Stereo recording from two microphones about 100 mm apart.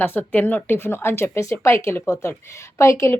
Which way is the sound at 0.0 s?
20° left (ahead or behind).